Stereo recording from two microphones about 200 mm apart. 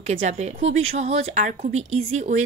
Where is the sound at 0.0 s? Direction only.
35° right (ahead or behind).